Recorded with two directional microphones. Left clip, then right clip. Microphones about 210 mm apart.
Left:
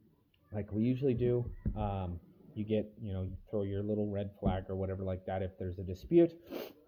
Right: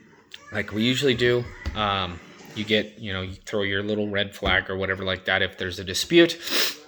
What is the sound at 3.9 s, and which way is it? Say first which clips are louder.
Speech: right 11 dB; 15° right (ahead or behind).